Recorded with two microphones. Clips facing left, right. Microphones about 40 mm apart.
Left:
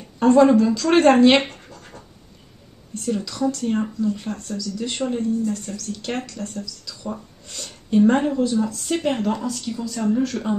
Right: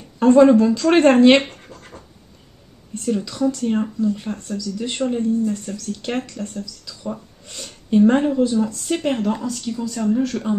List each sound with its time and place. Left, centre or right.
0.2 s speech: centre
1.7 s scratch: right
3.1 s speech: centre
5.4 s speech: right; by 10.5 s centre